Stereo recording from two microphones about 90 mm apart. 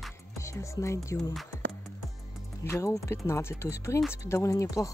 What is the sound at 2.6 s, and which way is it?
Speech, 35° left (ahead or behind).